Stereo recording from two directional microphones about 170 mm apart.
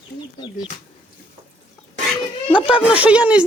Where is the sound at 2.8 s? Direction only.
5° right (ahead or behind).